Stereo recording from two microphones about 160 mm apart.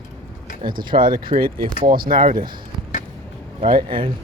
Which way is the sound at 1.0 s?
60° right (ahead or behind).